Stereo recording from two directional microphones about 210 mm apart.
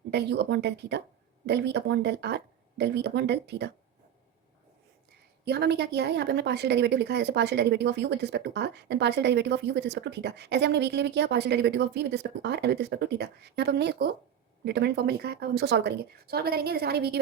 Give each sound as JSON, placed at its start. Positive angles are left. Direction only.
{"t": 0.1, "sound": "a woman's voice", "side_deg": -55}
{"t": 5.5, "sound": "a woman's voice", "side_deg": -50}